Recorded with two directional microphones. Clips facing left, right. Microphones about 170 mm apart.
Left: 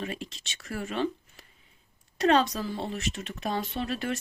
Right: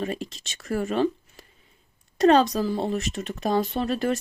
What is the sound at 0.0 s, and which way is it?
Speech, 40° right (ahead or behind).